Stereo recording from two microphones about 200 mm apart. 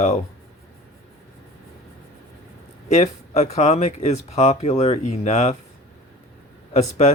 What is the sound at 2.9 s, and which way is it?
Speech, 35° left (ahead or behind).